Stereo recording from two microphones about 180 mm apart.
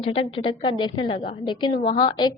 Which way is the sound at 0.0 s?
30° left (ahead or behind).